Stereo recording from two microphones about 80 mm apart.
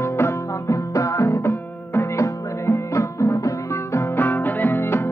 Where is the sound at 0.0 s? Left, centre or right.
Left.